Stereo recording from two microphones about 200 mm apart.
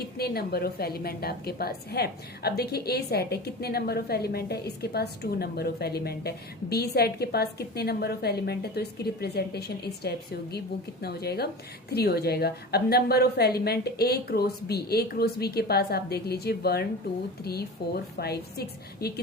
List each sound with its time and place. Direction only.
0.2 s a woman's voice: 50° left (ahead or behind)